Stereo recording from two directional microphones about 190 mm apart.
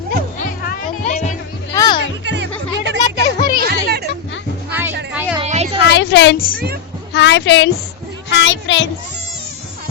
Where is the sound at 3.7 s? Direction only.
55° right (ahead or behind).